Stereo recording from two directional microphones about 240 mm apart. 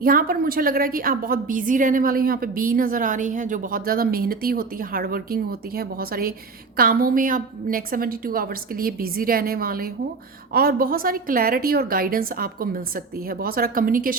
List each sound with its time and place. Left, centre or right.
0.0 s a woman's voice: right